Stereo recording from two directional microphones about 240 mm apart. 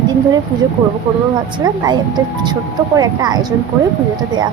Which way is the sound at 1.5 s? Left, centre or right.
Centre.